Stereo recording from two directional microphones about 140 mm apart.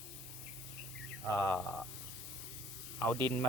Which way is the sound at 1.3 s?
15° left (ahead or behind).